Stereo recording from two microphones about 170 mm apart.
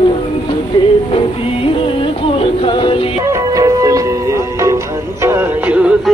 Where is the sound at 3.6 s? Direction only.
20° right (ahead or behind).